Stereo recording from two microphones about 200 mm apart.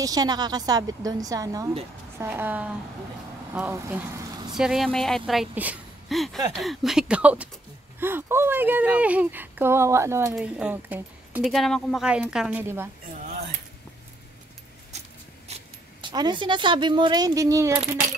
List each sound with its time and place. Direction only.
0.0 s a woman's voice: 20° right (ahead or behind)
15.4 s speech: 25° right (ahead or behind)